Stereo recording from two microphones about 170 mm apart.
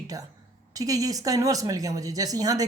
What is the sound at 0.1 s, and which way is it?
Speech, 20° right (ahead or behind).